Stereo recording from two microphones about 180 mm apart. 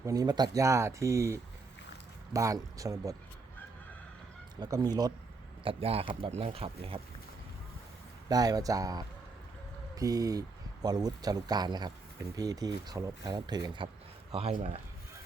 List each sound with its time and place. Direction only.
0.0 s speech: 20° right (ahead or behind)
4.6 s speech: 25° right (ahead or behind)
8.3 s speech: 20° right (ahead or behind)
14.3 s speech: 35° right (ahead or behind)